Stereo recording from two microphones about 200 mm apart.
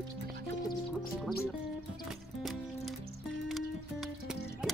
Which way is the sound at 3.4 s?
Centre (ahead or behind).